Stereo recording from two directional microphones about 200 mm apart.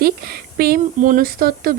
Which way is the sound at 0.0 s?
50° right (ahead or behind).